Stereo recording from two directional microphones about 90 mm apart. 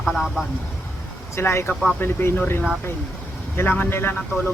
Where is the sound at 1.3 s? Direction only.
30° left (ahead or behind).